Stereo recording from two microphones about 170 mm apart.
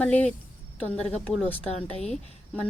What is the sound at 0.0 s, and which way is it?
Speech, 10° left (ahead or behind).